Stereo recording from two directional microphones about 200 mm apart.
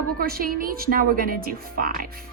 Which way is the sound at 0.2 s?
45° right (ahead or behind).